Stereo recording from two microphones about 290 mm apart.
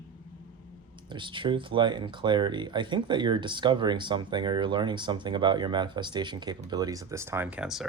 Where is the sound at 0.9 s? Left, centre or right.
Centre.